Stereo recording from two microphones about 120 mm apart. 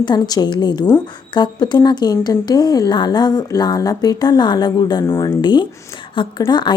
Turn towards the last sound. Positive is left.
turn(degrees=40)  # may be behind; listen again after turning